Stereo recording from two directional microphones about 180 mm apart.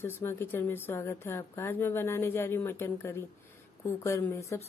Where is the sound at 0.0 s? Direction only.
15° left (ahead or behind).